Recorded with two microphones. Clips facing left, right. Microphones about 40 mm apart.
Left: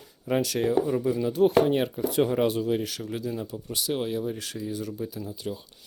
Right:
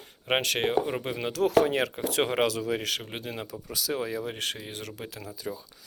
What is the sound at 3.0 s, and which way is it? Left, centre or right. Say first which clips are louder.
Speech: left 5 dB; right.